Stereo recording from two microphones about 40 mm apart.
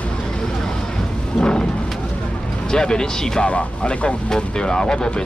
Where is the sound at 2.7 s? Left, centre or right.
Centre.